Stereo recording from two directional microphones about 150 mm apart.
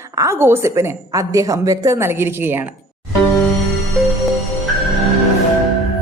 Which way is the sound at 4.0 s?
Centre (ahead or behind).